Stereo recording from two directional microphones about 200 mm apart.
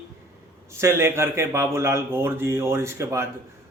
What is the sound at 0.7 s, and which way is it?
Speech, 15° right (ahead or behind).